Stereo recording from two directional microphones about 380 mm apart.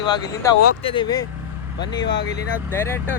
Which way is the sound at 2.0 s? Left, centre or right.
Left.